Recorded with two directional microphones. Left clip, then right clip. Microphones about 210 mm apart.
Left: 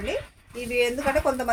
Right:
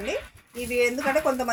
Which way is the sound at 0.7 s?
20° left (ahead or behind).